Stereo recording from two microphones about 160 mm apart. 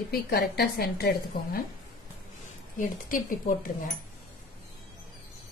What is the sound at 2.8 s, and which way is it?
Speech, 55° left (ahead or behind).